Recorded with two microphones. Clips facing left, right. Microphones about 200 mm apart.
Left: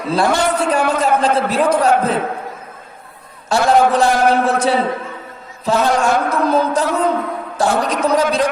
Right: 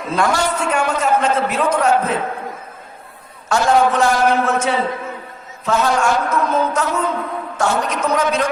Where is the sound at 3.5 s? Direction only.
35° left (ahead or behind).